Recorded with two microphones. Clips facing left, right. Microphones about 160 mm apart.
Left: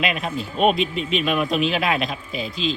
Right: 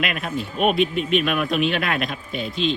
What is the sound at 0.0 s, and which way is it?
Speech, centre (ahead or behind).